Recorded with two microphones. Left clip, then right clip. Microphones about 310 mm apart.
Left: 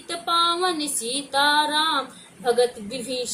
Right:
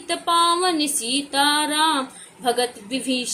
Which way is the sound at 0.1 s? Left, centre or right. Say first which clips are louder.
Right 3 dB; centre.